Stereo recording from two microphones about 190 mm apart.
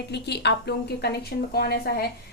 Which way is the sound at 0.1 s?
60° left (ahead or behind).